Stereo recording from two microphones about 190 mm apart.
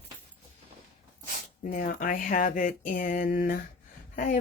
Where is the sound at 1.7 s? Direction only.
50° left (ahead or behind).